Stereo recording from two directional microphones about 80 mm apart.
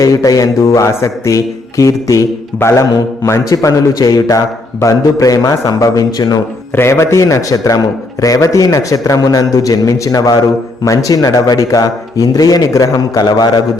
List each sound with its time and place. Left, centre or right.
0.0 s speech: left
6.7 s a man's voice: left